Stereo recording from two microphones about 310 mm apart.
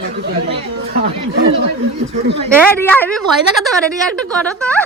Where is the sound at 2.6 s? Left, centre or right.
Centre.